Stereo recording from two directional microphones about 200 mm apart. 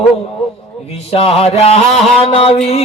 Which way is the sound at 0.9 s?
30° left (ahead or behind).